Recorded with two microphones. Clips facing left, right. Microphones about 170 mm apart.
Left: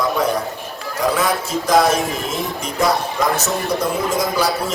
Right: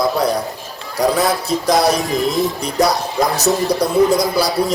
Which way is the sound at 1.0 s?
35° right (ahead or behind).